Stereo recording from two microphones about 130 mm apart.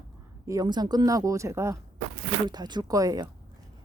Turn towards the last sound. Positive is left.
turn(degrees=-25)  # may be behind; listen again after turning